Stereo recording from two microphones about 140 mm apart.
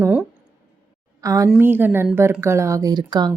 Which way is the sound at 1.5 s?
15° right (ahead or behind).